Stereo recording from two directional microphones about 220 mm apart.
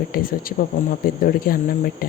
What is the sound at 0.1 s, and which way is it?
Speech, 40° left (ahead or behind).